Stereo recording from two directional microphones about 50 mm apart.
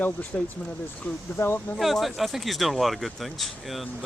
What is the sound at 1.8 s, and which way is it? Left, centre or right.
Speech, centre.